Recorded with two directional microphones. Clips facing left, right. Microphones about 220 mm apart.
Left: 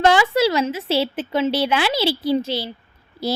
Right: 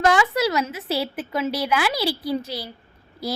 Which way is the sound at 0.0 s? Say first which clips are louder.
Left 3 dB; 30° left (ahead or behind).